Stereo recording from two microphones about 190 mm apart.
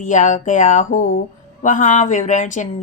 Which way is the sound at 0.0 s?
40° left (ahead or behind).